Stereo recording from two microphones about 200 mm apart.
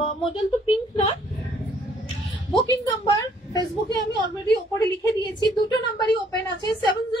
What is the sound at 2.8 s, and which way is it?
Speech, 20° left (ahead or behind).